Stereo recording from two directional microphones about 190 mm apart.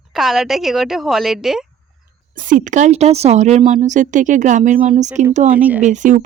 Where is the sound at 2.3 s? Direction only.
45° right (ahead or behind).